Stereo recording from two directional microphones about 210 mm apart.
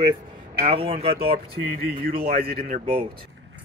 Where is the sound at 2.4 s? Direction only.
45° right (ahead or behind).